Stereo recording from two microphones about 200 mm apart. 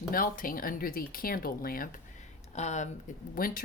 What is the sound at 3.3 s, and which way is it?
Speech, 45° left (ahead or behind).